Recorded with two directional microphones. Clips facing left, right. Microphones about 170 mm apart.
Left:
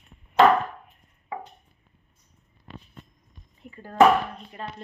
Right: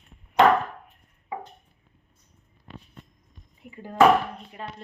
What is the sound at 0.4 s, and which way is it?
Chop, 20° right (ahead or behind).